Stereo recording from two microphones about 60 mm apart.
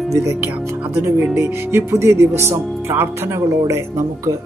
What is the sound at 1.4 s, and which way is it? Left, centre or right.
Speech, right.